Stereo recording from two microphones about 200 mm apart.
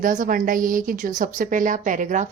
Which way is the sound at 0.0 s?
40° right (ahead or behind).